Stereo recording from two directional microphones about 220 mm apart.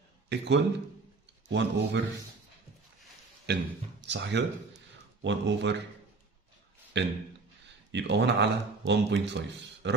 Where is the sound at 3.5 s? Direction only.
50° right (ahead or behind).